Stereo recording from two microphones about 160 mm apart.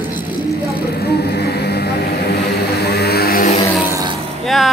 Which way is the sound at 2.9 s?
85° left.